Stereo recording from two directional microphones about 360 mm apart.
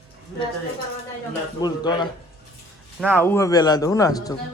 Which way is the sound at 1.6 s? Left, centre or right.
Centre.